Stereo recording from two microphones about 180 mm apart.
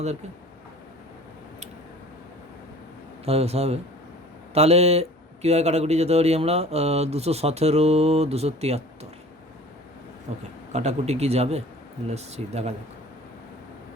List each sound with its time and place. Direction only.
3.2 s a man's voice: 35° right (ahead or behind)
10.7 s a man's voice: 40° right (ahead or behind)